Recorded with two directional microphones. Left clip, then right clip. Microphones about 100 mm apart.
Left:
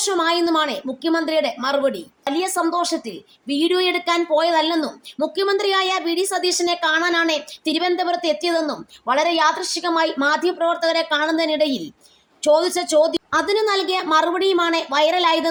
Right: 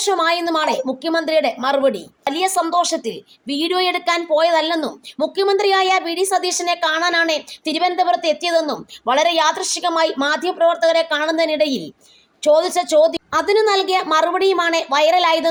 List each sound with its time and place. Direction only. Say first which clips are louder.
0.0 s a woman's voice: right 2 dB; 30° right (ahead or behind)
3.4 s a woman's voice: even; 30° right (ahead or behind)